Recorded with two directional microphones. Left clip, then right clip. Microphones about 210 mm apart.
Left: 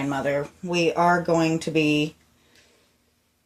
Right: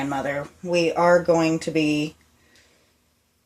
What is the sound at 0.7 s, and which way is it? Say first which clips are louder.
Speech: right 3 dB; 45° left (ahead or behind).